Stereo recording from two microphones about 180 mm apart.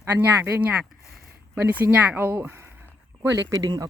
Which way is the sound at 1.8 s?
10° right (ahead or behind).